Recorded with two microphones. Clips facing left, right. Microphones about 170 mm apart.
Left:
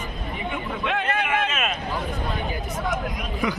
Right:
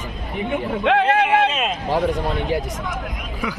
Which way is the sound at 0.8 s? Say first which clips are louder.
Right 9 dB; 90° right.